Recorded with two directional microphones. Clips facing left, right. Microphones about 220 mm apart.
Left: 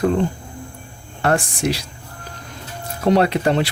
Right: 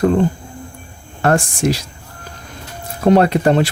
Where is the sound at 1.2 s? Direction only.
45° right (ahead or behind).